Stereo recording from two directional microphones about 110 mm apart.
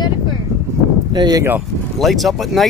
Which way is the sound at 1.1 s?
40° right (ahead or behind).